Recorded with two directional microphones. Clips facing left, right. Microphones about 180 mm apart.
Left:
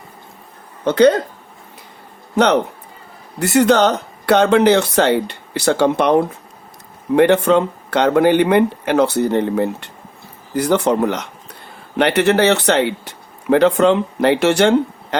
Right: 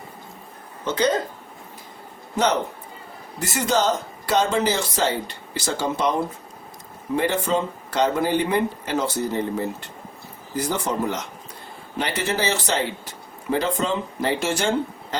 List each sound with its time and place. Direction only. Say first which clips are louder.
0.9 s speech: left 10 dB; 65° left (ahead or behind)
2.3 s speech: left 7 dB; 65° left (ahead or behind)